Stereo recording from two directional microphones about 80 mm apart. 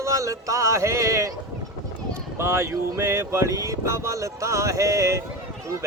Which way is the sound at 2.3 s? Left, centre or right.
Right.